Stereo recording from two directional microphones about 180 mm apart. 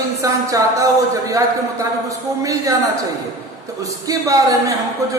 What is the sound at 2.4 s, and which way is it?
Speech, 20° right (ahead or behind).